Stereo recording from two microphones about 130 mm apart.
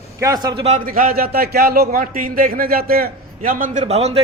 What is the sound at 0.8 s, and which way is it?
Speech, 90° right.